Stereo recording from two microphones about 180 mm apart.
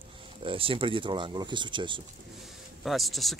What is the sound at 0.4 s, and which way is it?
Speech, 30° right (ahead or behind).